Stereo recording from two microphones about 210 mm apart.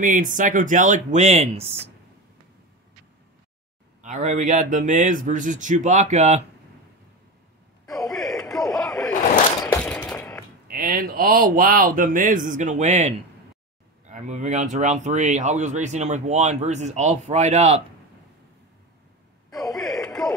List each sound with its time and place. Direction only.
0.0 s speech: 40° right (ahead or behind)
4.0 s speech: 35° right (ahead or behind)
7.9 s a sound: centre (ahead or behind)
10.7 s speech: 40° right (ahead or behind)
19.7 s a sound: centre (ahead or behind)
20.2 s radio: centre (ahead or behind)